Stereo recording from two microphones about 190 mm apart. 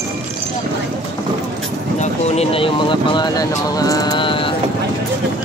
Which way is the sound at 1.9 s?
35° left (ahead or behind).